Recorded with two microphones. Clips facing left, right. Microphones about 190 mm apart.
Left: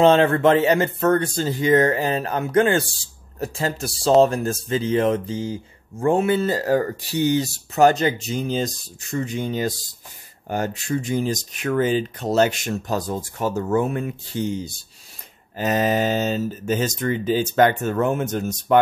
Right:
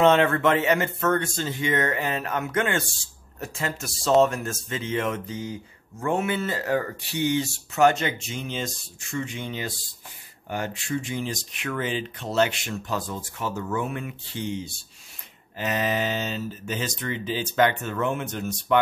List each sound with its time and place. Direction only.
0.0 s speech: 30° left (ahead or behind)